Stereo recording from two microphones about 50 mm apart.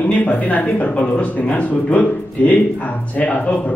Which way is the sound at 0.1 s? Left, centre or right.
Left.